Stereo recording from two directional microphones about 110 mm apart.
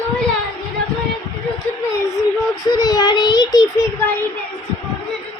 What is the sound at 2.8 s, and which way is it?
Child singing, 35° left (ahead or behind).